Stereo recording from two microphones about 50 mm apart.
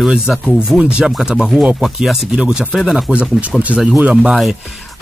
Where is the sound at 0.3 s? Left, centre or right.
Centre.